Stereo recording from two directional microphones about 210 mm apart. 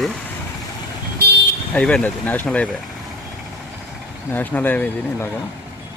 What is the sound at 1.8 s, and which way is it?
Speech, 5° left (ahead or behind).